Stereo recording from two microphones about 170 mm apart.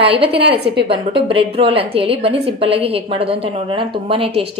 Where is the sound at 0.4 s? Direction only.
35° right (ahead or behind).